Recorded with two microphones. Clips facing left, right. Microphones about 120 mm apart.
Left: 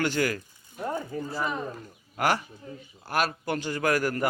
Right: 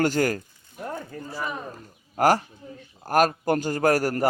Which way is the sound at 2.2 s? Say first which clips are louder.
Right 6 dB; 40° right (ahead or behind).